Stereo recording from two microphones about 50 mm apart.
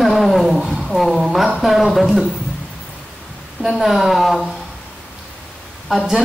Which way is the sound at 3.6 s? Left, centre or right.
Centre.